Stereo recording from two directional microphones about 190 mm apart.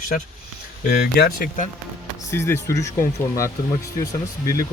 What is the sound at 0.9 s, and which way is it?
Speech, 50° left (ahead or behind).